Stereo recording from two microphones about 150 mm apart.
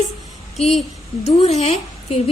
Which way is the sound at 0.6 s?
45° left (ahead or behind).